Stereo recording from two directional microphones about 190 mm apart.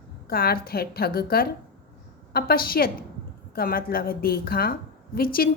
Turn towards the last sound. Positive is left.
turn(degrees=50)  # may be behind; listen again after turning